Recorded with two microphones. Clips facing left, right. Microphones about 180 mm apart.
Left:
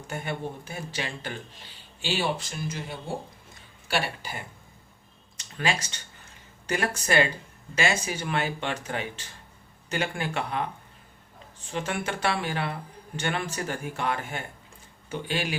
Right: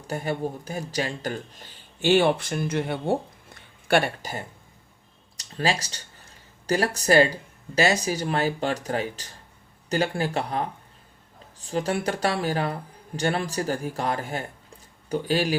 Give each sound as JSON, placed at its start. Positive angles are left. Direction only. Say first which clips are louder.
{"t": 0.1, "sound": "speech", "louder": "right 5 dB", "side_deg": -35}